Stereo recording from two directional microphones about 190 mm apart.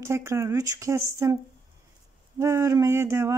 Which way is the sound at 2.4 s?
15° right (ahead or behind).